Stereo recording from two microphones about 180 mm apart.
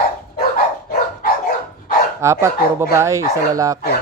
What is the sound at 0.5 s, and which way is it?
Dog, 55° left (ahead or behind).